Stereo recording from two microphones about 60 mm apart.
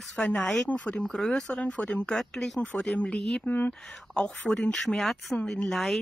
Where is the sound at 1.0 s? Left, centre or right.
Centre.